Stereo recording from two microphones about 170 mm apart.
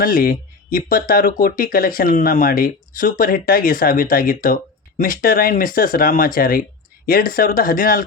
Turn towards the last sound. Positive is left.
turn(degrees=60)  # may be behind; listen again after turning